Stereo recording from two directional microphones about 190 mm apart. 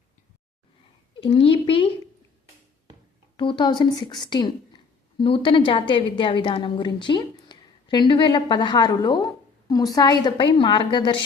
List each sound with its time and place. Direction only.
1.2 s a woman's voice: 30° left (ahead or behind)
3.3 s a woman's voice: 25° left (ahead or behind)